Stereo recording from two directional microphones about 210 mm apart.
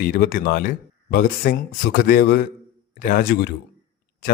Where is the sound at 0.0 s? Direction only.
45° left (ahead or behind).